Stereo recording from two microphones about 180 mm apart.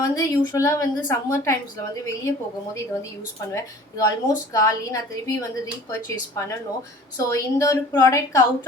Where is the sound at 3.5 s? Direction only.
20° left (ahead or behind).